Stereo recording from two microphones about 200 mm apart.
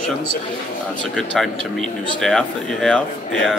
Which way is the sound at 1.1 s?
Centre (ahead or behind).